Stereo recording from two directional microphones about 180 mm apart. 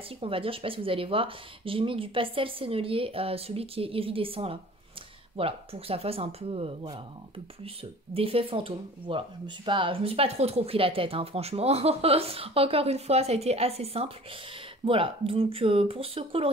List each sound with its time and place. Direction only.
0.2 s speech: 30° right (ahead or behind)